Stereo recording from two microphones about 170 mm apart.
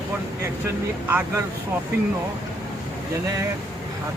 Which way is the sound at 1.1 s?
10° right (ahead or behind).